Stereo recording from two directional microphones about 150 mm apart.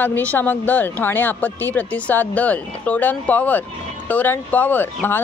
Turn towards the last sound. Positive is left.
turn(degrees=15)  # may be behind; listen again after turning